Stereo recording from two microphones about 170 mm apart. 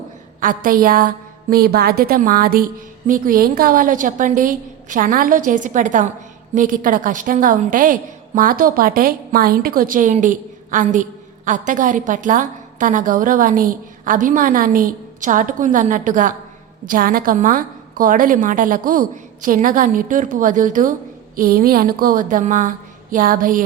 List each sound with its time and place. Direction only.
0.3 s a woman's voice: 55° right (ahead or behind)